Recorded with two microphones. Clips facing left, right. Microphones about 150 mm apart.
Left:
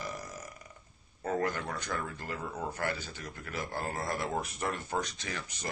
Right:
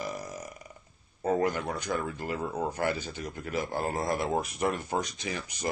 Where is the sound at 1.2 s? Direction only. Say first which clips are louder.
Right 5 dB; 20° right (ahead or behind).